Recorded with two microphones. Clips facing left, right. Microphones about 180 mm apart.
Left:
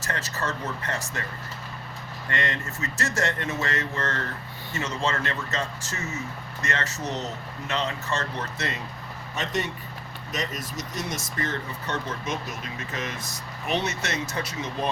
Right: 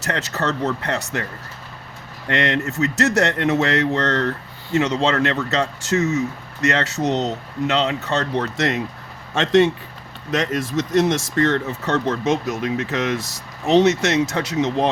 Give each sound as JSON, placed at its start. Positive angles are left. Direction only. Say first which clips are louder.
{"t": 0.0, "sound": "speech", "louder": "right 7 dB", "side_deg": -70}
{"t": 2.2, "sound": "speech", "louder": "right 9 dB", "side_deg": -75}
{"t": 9.3, "sound": "speech", "louder": "right 14 dB", "side_deg": -90}